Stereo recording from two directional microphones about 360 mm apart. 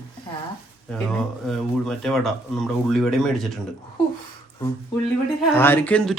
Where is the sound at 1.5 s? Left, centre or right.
Centre.